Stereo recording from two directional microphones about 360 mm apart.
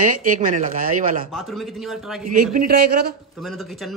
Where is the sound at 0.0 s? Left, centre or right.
Right.